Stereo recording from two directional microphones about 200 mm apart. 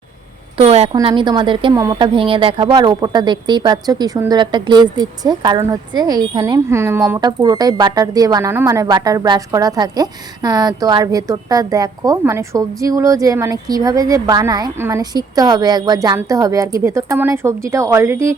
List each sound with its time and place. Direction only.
0.5 s a woman's voice: 30° right (ahead or behind); by 18.3 s 15° right (ahead or behind)